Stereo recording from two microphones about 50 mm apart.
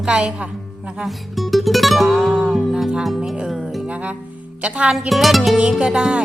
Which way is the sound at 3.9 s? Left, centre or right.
Right.